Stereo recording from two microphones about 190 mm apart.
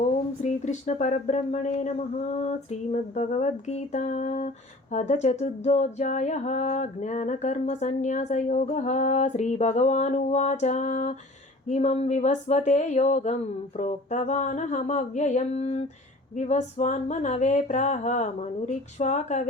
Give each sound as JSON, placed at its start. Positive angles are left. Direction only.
{"t": 0.4, "sound": "speech", "side_deg": 40}